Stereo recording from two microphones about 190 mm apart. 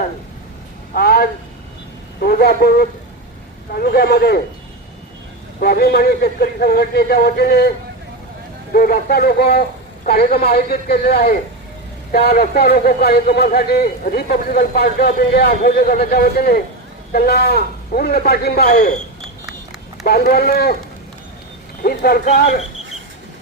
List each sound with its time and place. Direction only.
0.9 s a sound: 55° left (ahead or behind)
2.2 s a man's voice: 55° left (ahead or behind)
5.5 s a man's voice: 55° left (ahead or behind)
8.7 s a man's voice: 50° left (ahead or behind)
18.7 s speech: 40° left (ahead or behind)
20.1 s a man's voice: 55° left (ahead or behind)
21.8 s a man's voice: 50° left (ahead or behind)